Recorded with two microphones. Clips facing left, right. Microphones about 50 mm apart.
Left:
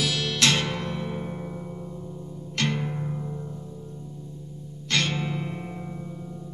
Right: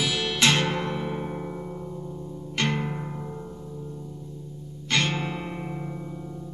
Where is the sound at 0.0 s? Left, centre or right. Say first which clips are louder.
Right 1 dB; centre.